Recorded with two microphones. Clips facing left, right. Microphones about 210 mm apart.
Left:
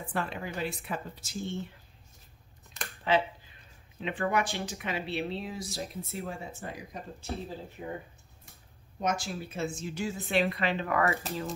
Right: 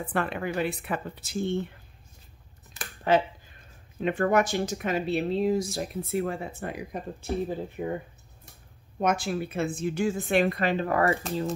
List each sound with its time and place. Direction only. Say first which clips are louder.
0.0 s speech: right 5 dB; 60° right (ahead or behind)
3.0 s speech: right 4 dB; 45° right (ahead or behind)
9.0 s speech: right 6 dB; 55° right (ahead or behind); by 11.1 s 35° right (ahead or behind)